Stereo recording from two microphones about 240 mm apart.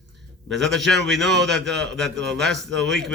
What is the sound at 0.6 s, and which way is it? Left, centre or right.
A man's voice, centre.